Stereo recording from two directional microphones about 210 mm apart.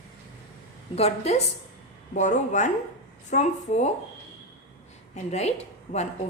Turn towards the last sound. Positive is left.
turn(degrees=30)  # may be behind; listen again after turning